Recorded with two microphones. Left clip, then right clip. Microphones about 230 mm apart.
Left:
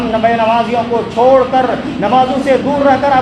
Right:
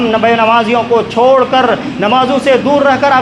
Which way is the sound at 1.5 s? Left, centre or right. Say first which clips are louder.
Right 3 dB; right.